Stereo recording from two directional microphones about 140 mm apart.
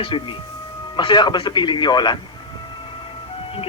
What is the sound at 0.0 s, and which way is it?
Speech, 35° left (ahead or behind).